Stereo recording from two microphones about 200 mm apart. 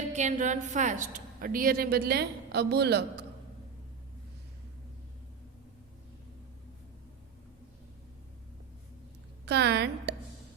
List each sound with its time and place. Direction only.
0.2 s a woman's voice: 35° right (ahead or behind); by 3.2 s 55° right (ahead or behind)
9.5 s a woman's voice: 55° right (ahead or behind)